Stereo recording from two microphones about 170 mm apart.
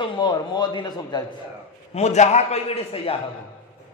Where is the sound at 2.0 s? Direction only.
40° left (ahead or behind).